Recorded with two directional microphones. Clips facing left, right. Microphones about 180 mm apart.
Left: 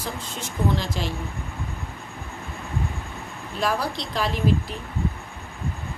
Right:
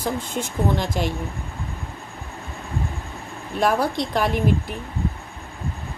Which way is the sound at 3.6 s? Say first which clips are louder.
Right 5 dB; 50° right (ahead or behind).